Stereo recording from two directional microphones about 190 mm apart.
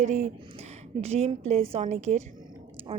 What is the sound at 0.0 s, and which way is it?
Speech, 40° right (ahead or behind).